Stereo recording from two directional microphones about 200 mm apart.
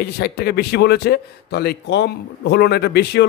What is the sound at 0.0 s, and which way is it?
A man's voice, 55° left (ahead or behind).